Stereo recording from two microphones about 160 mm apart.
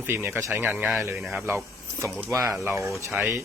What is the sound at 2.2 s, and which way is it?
Speech, 20° right (ahead or behind).